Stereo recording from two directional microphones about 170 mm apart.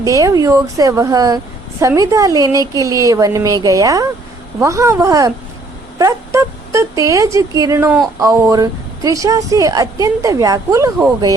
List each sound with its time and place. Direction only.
0.0 s a woman's voice: 20° right (ahead or behind)